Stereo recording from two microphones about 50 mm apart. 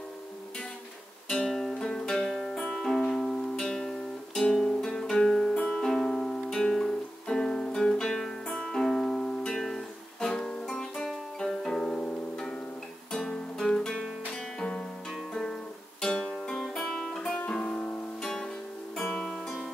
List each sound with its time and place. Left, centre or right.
1.4 s music: centre
13.1 s music: centre
16.0 s guitar: centre
17.6 s music: centre